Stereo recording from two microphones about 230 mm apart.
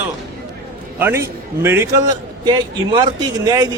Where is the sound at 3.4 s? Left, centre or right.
Centre.